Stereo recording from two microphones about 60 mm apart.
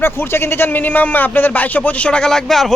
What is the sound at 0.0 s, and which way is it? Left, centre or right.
A man's voice, left.